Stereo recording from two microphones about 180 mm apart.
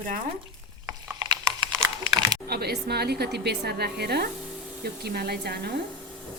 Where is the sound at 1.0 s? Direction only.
20° right (ahead or behind).